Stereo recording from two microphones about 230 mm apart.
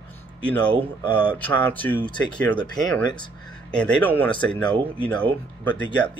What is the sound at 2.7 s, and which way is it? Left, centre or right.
Speech, centre.